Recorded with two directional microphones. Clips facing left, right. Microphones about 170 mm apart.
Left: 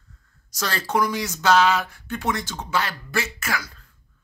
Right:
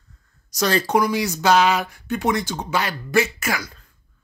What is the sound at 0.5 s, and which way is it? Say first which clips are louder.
Speech: right 7 dB; 20° right (ahead or behind).